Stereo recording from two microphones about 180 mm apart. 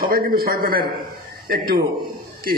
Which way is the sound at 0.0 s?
55° right (ahead or behind).